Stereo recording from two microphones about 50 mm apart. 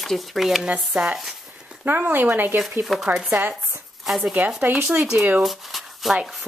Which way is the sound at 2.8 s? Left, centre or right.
Centre.